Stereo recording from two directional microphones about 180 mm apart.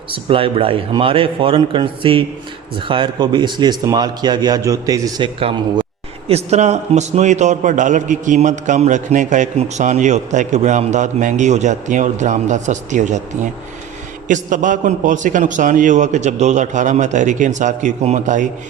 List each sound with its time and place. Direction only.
0.1 s a man's voice: 30° right (ahead or behind)